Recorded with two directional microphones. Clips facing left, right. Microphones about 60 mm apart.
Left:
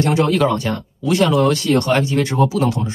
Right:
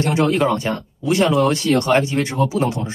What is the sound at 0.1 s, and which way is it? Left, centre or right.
Speech, right.